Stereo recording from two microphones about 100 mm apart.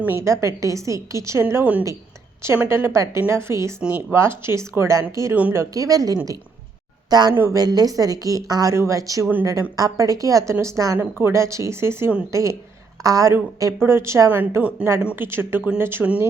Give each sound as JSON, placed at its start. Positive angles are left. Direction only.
{"t": 0.2, "sound": "a woman's voice", "side_deg": -30}
{"t": 5.3, "sound": "a woman's voice", "side_deg": -15}
{"t": 5.5, "sound": "a woman's voice", "side_deg": -35}